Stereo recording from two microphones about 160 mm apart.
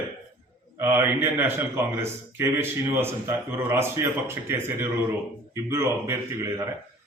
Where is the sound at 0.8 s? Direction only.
15° right (ahead or behind).